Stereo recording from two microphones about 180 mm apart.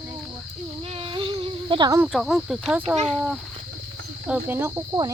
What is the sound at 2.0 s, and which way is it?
Speech, centre (ahead or behind).